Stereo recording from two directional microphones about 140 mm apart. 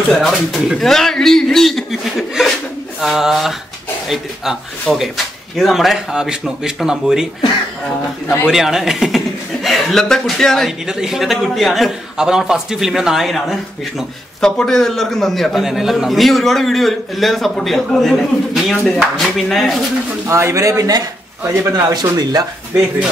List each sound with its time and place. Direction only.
0.1 s speech: centre (ahead or behind)
8.5 s speech: 5° right (ahead or behind)
20.2 s speech: 20° right (ahead or behind)